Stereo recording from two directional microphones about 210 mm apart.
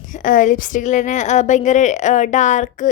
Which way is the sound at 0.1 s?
40° left (ahead or behind).